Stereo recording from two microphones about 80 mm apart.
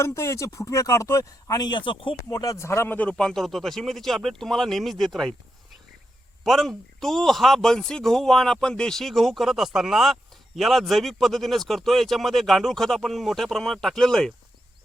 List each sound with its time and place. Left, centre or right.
0.0 s speech: left
1.6 s speech: left
2.3 s speech: left
3.2 s speech: centre
6.4 s speech: centre